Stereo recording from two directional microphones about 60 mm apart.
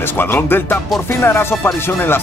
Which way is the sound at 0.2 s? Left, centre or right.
Left.